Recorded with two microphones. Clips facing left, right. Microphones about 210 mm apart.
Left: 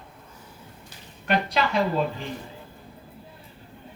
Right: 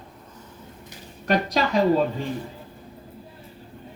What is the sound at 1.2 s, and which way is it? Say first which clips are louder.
Speech: right 2 dB; 40° right (ahead or behind).